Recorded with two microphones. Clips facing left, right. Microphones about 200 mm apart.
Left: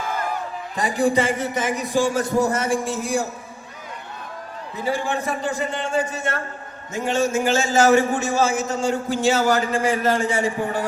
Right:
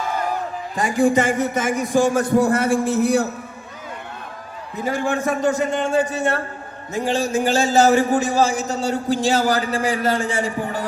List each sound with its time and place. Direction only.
1.0 s a man's voice: 50° right (ahead or behind)
4.8 s a man's voice: 50° right (ahead or behind)